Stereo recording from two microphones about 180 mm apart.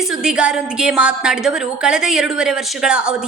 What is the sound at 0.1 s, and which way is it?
A woman's voice, 5° right (ahead or behind).